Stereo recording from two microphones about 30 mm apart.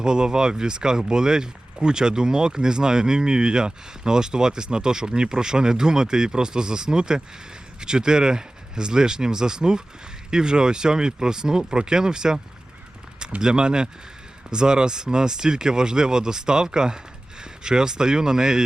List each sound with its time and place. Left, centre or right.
0.0 s speech: right
13.4 s speech: right